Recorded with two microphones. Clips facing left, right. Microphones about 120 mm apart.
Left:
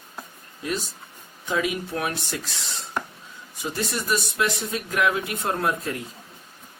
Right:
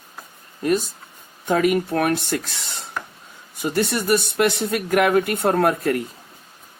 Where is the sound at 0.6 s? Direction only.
50° right (ahead or behind).